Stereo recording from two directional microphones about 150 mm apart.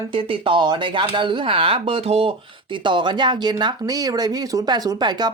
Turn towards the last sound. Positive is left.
turn(degrees=-30)  # may be behind; listen again after turning